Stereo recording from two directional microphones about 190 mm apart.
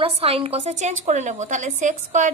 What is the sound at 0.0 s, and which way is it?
A woman's voice, 30° right (ahead or behind).